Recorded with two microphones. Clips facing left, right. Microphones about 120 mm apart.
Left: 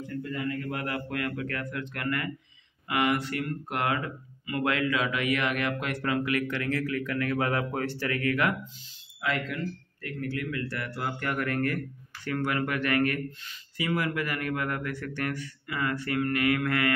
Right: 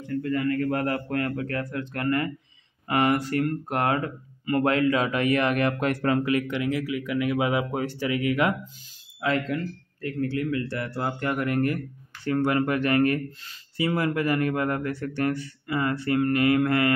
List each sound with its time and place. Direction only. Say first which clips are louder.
0.2 s a man's voice: right 8 dB; 60° right (ahead or behind)
0.7 s speech: right 6 dB; 40° right (ahead or behind)
6.3 s a man's voice: right 3 dB; 20° right (ahead or behind)
9.2 s a man's voice: right 5 dB; 35° right (ahead or behind)